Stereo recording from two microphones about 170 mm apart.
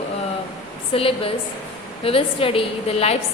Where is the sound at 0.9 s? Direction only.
35° left (ahead or behind).